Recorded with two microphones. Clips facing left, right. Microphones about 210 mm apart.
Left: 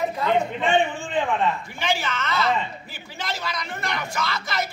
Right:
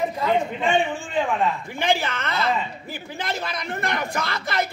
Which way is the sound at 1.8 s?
55° right (ahead or behind).